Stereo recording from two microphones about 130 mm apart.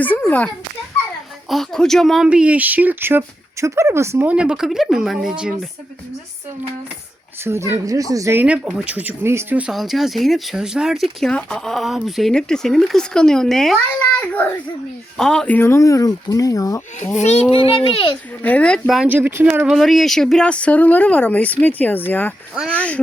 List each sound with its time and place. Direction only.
0.3 s speech: 10° left (ahead or behind); by 5.5 s 5° right (ahead or behind)
7.4 s speech: 20° right (ahead or behind)
8.4 s speech: 10° right (ahead or behind); by 16.8 s 25° left (ahead or behind)
17.2 s a child's voice: 60° left (ahead or behind)
17.5 s a child's voice: 45° left (ahead or behind)
18.4 s speech: 10° left (ahead or behind)
19.0 s speech: 15° right (ahead or behind)
19.6 s speech: centre (ahead or behind)